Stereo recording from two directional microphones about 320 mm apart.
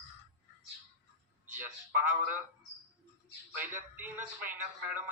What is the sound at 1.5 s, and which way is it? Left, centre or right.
Speech, centre.